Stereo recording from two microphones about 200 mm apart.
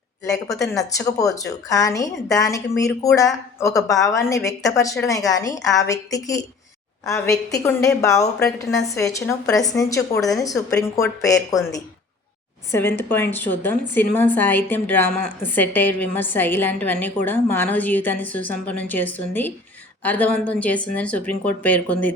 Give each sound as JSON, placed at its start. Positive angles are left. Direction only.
{"t": 0.3, "sound": "a woman's voice", "side_deg": 15}
{"t": 12.7, "sound": "a woman's voice", "side_deg": 10}